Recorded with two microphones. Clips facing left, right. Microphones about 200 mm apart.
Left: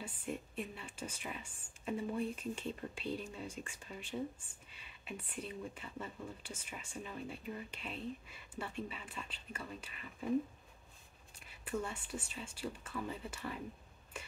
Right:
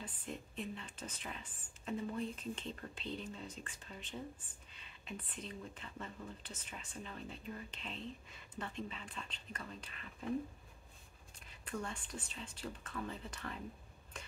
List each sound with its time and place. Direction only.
0.0 s a woman's voice: 10° left (ahead or behind)
11.3 s a woman's voice: 5° left (ahead or behind)
14.1 s stir: 10° left (ahead or behind)